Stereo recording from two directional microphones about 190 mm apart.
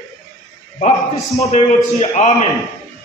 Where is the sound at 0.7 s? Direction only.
35° left (ahead or behind).